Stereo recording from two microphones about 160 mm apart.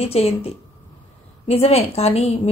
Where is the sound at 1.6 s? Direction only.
40° left (ahead or behind).